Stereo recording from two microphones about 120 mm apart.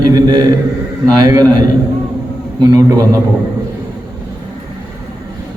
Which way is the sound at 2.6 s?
35° right (ahead or behind).